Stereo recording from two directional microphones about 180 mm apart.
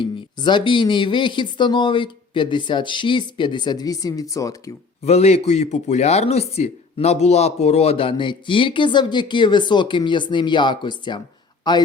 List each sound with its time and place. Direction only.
0.0 s speech: 25° left (ahead or behind)
5.0 s speech: 35° left (ahead or behind)